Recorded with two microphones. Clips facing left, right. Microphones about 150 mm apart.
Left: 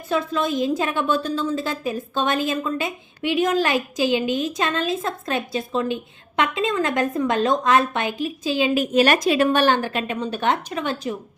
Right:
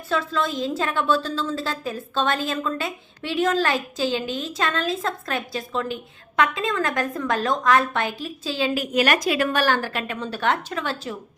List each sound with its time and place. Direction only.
0.1 s a woman's voice: 15° left (ahead or behind)